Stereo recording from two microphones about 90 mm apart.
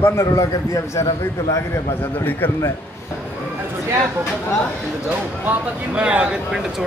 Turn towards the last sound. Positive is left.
turn(degrees=-10)  # may be behind; listen again after turning